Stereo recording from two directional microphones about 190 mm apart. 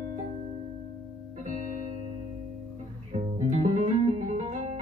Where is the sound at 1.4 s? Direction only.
40° right (ahead or behind).